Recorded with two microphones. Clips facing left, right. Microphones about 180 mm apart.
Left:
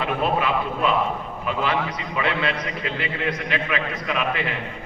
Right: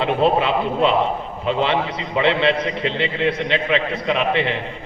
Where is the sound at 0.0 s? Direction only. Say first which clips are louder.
Right 5 dB; 25° right (ahead or behind).